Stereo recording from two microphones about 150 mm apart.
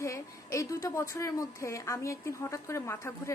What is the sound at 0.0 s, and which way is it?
A woman's voice, 20° left (ahead or behind).